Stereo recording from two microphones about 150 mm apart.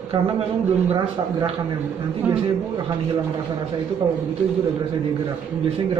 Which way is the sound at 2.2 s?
10° right (ahead or behind).